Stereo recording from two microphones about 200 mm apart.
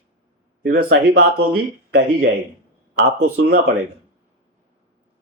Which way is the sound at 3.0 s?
90° right.